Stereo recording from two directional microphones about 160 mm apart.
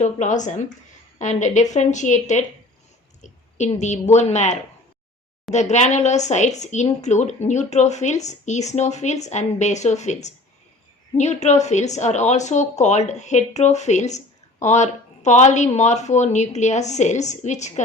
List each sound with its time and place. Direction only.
0.0 s speech: 50° left (ahead or behind)
3.2 s a sound: 45° left (ahead or behind)
3.8 s speech: 45° left (ahead or behind)